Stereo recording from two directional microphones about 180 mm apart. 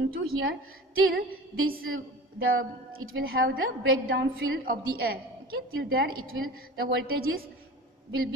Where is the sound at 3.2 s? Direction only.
55° right (ahead or behind).